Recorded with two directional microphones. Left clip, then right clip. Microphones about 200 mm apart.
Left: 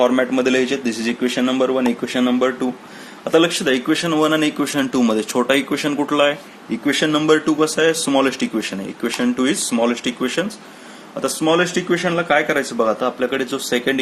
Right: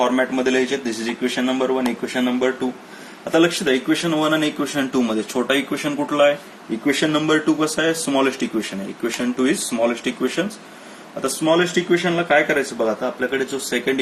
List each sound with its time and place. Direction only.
0.0 s speech: 55° left (ahead or behind)